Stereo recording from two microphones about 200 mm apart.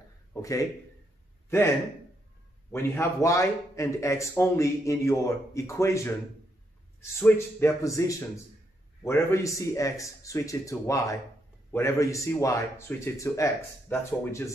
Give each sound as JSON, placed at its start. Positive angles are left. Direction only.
{"t": 0.3, "sound": "speech", "side_deg": 15}
{"t": 2.7, "sound": "a man's voice", "side_deg": 15}